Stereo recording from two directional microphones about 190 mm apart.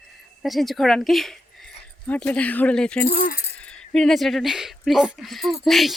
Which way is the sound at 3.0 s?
45° left (ahead or behind).